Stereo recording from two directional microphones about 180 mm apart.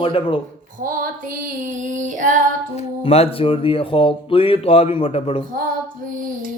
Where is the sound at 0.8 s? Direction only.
50° right (ahead or behind).